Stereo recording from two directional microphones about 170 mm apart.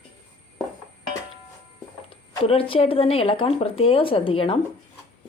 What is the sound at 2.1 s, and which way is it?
Speech, 35° left (ahead or behind).